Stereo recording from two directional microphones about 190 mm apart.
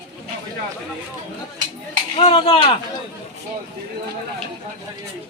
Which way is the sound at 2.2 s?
30° left (ahead or behind).